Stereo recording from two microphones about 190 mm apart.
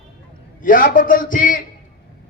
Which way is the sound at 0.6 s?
45° left (ahead or behind).